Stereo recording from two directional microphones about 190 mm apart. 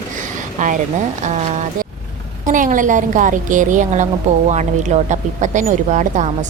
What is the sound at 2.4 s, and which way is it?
A woman's voice, 45° right (ahead or behind).